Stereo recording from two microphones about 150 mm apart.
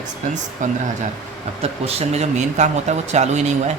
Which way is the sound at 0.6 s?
55° right (ahead or behind).